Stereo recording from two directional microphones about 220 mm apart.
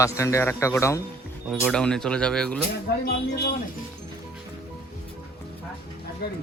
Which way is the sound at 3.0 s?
45° left (ahead or behind).